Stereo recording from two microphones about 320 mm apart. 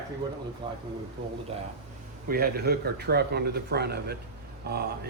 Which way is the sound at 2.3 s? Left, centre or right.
Right.